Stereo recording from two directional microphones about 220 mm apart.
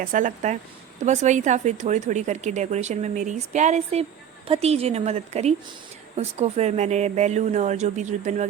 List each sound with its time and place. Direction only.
0.0 s a woman's voice: 35° right (ahead or behind)